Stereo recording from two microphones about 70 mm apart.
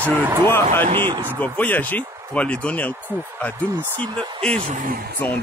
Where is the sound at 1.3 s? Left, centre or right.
Left.